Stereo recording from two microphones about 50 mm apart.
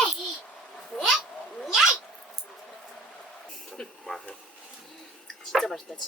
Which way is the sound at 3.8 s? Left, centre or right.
Centre.